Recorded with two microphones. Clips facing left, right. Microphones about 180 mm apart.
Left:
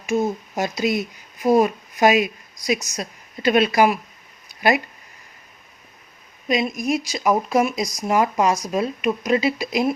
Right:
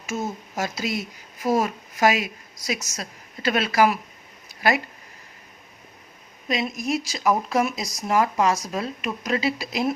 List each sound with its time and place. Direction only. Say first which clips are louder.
0.0 s speech: left 8 dB; 15° left (ahead or behind)
6.5 s speech: left 4 dB; 15° left (ahead or behind)